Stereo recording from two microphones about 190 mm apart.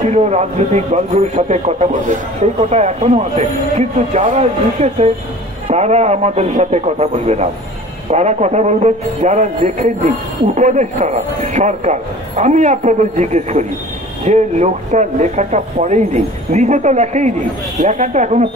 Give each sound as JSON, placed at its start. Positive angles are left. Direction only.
{"t": 0.1, "sound": "a man's voice", "side_deg": -35}